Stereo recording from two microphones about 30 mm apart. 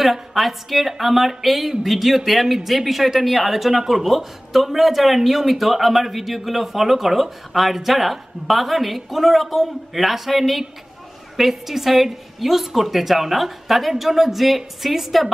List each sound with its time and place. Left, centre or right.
0.0 s a woman's voice: centre